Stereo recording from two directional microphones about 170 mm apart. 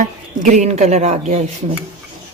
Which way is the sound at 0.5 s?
45° right (ahead or behind).